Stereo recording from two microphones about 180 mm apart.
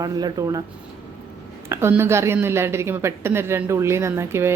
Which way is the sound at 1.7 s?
15° right (ahead or behind).